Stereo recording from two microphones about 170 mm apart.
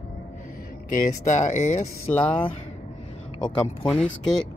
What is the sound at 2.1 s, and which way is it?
Speech, 5° left (ahead or behind).